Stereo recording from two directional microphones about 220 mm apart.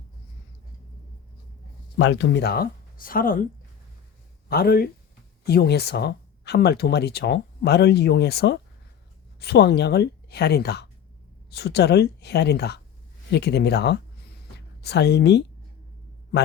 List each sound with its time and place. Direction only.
2.0 s speech: 55° left (ahead or behind)
4.4 s speech: 45° left (ahead or behind)